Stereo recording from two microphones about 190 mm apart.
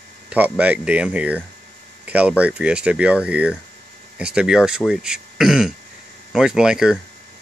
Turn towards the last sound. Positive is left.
turn(degrees=-5)  # may be behind; listen again after turning